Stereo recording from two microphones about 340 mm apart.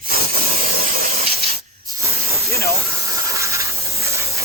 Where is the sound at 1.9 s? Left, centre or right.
Centre.